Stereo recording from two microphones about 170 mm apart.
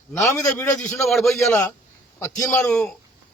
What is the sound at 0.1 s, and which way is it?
A man's voice, 15° left (ahead or behind).